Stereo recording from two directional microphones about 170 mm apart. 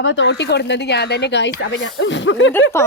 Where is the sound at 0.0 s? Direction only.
90° left.